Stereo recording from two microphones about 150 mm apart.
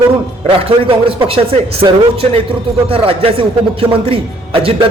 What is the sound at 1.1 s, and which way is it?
A man's voice, 40° right (ahead or behind).